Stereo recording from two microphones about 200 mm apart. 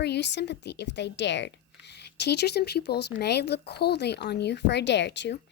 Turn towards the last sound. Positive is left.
turn(degrees=60)  # may be behind; listen again after turning